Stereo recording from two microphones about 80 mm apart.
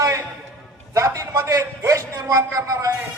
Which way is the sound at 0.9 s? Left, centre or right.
Right.